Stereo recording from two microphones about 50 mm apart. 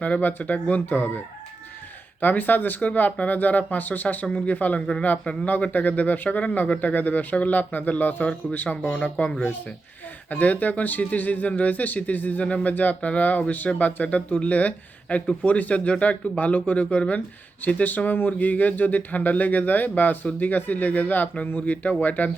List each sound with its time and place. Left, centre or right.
0.0 s speech: left
2.2 s speech: left; by 5.5 s centre
5.5 s speech: left